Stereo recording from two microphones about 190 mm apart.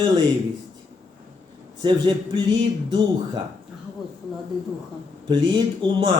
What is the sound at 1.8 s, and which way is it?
Speech, 25° right (ahead or behind).